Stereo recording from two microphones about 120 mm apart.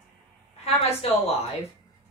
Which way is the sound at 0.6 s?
55° left (ahead or behind).